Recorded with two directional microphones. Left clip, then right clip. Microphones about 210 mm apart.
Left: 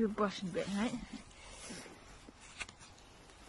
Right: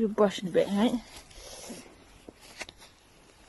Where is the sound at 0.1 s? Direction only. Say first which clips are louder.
Right 11 dB; 35° right (ahead or behind).